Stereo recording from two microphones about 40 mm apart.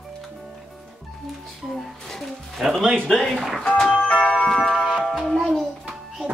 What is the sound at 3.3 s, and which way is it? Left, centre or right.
Speech, centre.